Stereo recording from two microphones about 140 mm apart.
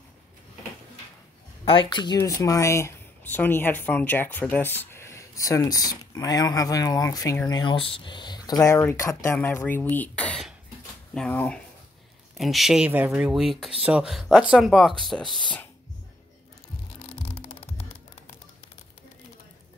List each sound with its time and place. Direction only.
1.6 s speech: 40° left (ahead or behind); by 15.3 s centre (ahead or behind)
17.0 s music: 45° left (ahead or behind)